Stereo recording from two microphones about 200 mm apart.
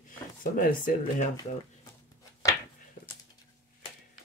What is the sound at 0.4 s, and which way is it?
Speech, 45° left (ahead or behind).